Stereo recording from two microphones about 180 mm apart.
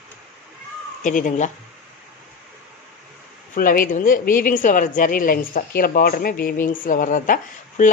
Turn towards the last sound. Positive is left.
turn(degrees=50)  # may be behind; listen again after turning